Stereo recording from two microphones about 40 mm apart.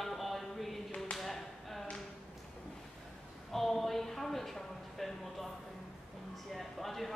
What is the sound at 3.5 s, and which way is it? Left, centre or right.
Speech, centre.